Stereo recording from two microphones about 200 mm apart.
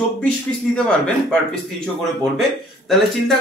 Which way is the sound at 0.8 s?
5° left (ahead or behind).